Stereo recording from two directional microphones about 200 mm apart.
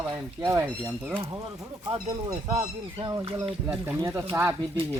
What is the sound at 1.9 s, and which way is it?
Speech, 20° right (ahead or behind).